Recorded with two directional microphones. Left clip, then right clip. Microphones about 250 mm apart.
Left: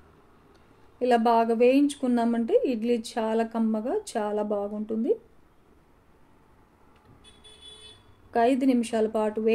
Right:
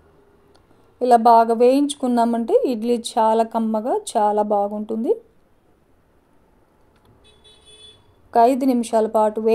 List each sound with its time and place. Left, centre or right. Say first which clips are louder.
0.5 s a sound: right 3 dB; right
1.9 s speech: right 7 dB; right
8.3 s speech: right 7 dB; right